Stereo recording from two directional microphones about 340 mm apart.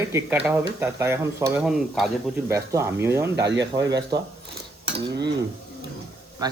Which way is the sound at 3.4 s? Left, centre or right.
Right.